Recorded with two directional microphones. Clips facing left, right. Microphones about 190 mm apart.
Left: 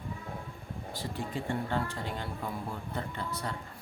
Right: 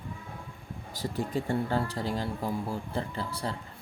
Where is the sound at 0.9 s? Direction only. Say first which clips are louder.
Right 6 dB; 40° right (ahead or behind).